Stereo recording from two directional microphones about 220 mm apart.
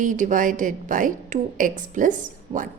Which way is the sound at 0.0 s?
35° right (ahead or behind).